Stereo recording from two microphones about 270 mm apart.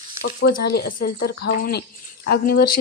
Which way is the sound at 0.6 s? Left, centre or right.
Left.